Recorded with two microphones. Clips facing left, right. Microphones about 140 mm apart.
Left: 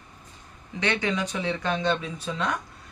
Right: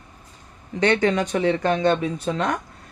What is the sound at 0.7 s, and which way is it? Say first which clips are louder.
Speech: right 7 dB; 45° right (ahead or behind).